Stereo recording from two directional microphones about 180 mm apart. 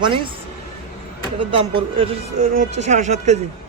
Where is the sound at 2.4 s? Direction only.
40° right (ahead or behind).